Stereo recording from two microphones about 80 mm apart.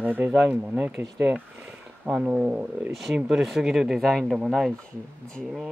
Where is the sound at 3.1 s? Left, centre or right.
Centre.